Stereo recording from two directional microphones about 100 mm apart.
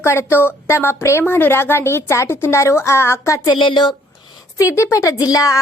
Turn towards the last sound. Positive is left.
turn(degrees=35)  # may be behind; listen again after turning